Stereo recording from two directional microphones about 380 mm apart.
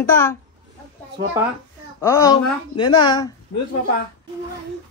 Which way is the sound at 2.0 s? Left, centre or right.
Centre.